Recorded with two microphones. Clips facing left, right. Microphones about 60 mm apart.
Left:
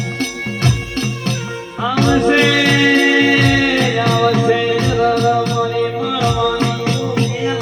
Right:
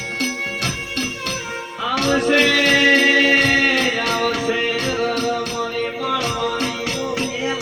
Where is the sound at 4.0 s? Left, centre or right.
Left.